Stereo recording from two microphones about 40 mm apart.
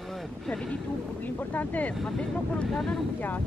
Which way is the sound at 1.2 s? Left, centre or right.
Left.